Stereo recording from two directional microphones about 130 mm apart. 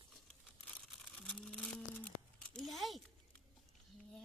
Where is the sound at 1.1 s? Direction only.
5° left (ahead or behind).